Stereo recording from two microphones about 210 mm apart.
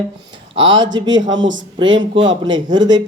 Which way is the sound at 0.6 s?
20° right (ahead or behind).